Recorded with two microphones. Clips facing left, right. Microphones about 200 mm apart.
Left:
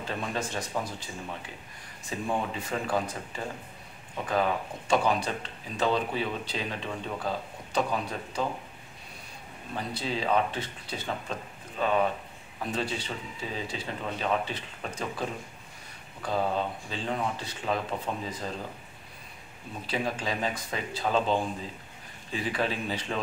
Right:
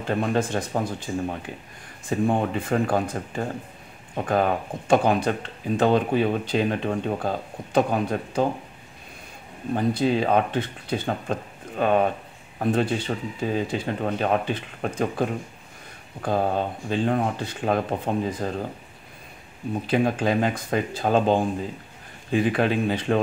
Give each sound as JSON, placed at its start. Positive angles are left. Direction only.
{"t": 0.1, "sound": "speech", "side_deg": -55}
{"t": 9.8, "sound": "speech", "side_deg": -55}
{"t": 19.9, "sound": "speech", "side_deg": -55}